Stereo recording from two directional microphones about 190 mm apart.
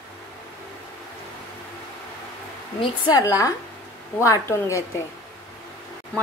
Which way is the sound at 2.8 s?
25° left (ahead or behind).